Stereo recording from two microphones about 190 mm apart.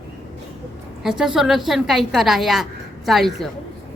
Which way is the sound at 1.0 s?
5° right (ahead or behind).